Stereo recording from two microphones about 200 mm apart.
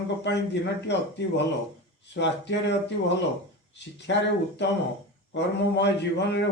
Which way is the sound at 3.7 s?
60° left (ahead or behind).